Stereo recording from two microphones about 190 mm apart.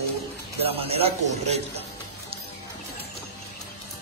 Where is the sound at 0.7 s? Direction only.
30° right (ahead or behind).